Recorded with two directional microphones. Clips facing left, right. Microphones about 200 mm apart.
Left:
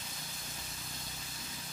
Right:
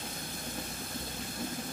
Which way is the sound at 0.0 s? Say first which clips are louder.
Right 9 dB; 55° right (ahead or behind).